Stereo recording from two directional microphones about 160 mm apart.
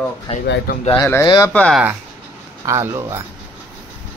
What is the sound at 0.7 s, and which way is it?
Speech, 75° left (ahead or behind).